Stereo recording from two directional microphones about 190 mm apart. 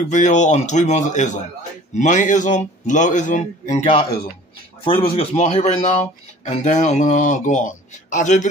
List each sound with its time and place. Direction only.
0.1 s speech: 40° left (ahead or behind)